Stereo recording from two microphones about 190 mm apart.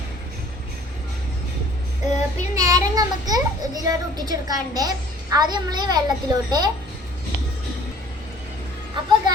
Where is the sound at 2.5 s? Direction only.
20° right (ahead or behind).